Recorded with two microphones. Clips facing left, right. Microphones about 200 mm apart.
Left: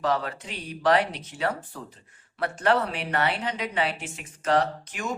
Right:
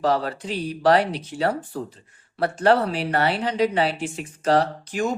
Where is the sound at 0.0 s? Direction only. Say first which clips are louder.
Right 4 dB; 35° right (ahead or behind).